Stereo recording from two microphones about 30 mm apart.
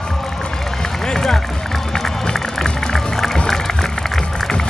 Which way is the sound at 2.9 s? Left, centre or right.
Centre.